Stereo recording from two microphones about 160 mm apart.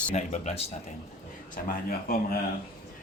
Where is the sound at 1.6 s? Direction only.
65° left (ahead or behind).